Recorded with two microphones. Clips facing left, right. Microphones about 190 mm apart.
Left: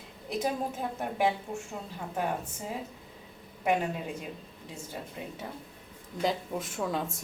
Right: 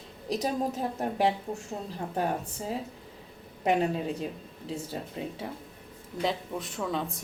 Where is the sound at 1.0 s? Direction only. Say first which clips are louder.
Right 1 dB; 35° right (ahead or behind).